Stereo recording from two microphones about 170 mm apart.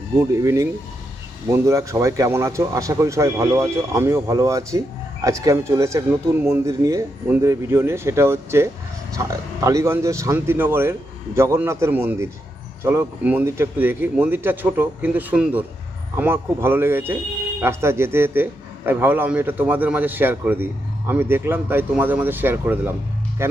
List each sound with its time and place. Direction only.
0.2 s speech: 15° right (ahead or behind)